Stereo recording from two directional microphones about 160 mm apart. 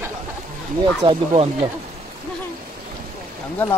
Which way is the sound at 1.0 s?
35° right (ahead or behind).